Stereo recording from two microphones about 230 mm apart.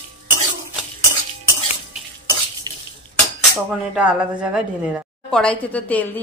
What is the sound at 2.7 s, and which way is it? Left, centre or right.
Cutlery, centre.